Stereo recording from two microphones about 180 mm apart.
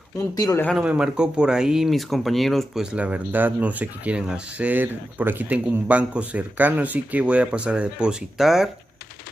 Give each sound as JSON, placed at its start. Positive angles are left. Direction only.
{"t": 0.4, "sound": "speech", "side_deg": 20}
{"t": 0.7, "sound": "speech", "side_deg": -5}